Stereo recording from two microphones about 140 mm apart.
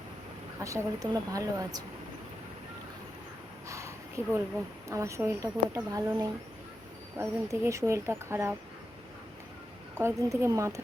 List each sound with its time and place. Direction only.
0.6 s a woman's voice: 20° right (ahead or behind)
3.7 s a sound: 20° right (ahead or behind)
4.9 s a woman's voice: 20° right (ahead or behind)
10.0 s a woman's voice: 20° right (ahead or behind)